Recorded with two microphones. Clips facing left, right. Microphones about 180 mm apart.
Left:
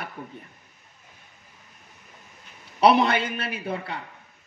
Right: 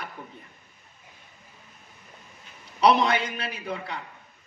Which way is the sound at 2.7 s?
60° left (ahead or behind).